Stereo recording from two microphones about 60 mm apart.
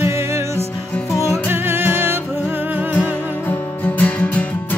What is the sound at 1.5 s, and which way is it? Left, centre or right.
Music, right.